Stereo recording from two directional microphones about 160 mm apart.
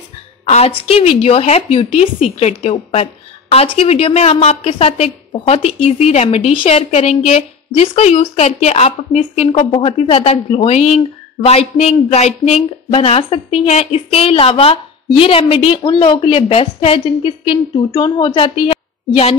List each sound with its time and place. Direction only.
0.5 s a woman's voice: 40° left (ahead or behind)